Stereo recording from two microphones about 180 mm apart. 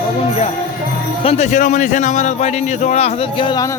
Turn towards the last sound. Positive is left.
turn(degrees=25)  # may be behind; listen again after turning